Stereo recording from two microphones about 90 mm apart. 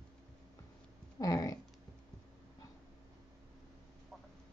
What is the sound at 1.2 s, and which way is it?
Dog, 40° left (ahead or behind).